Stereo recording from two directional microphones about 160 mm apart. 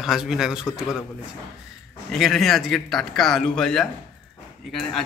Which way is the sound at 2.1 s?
Centre (ahead or behind).